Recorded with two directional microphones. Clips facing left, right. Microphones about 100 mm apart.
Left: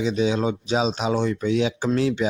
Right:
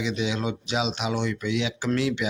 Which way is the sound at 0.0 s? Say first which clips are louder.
Left 6 dB; 35° left (ahead or behind).